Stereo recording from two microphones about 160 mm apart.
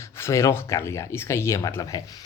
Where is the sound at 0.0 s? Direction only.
20° left (ahead or behind).